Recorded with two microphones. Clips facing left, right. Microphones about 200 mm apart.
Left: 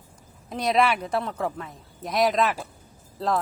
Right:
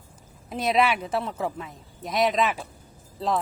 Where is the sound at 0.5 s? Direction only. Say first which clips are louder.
Even; 5° right (ahead or behind).